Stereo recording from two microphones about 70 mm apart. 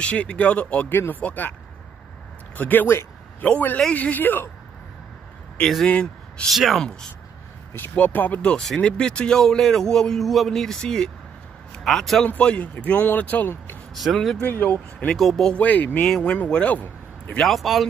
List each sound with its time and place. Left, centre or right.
0.0 s a man's voice: centre
0.8 s speech: left
2.5 s speech: left
5.6 s speech: centre
5.9 s speech: centre
6.5 s speech: centre
7.9 s speech: left
8.4 s a man's voice: centre
12.3 s speech: left
13.9 s speech: centre
14.4 s speech: left
15.1 s speech: centre
15.5 s a man's voice: left
17.4 s speech: centre